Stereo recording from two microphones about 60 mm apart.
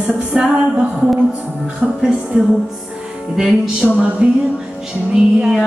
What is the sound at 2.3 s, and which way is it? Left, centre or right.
Music, centre.